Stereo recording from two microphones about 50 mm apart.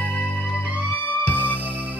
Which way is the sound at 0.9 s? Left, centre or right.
Left.